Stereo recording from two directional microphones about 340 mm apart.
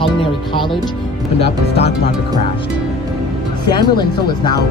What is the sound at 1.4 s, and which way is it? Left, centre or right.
Speech, centre.